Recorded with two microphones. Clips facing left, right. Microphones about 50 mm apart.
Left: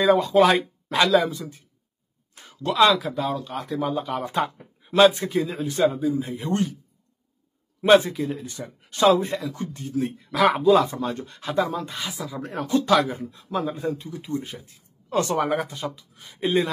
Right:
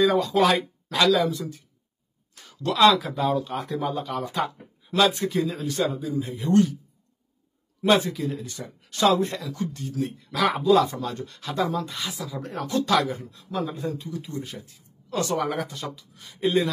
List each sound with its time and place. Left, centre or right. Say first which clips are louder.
0.0 s speech: left 3 dB; left
2.5 s speech: left 1 dB; centre
2.8 s speech: even; centre
4.1 s speech: left 2 dB; left
7.8 s speech: left 4 dB; left
10.7 s speech: left 1 dB; centre
11.9 s speech: left 1 dB; centre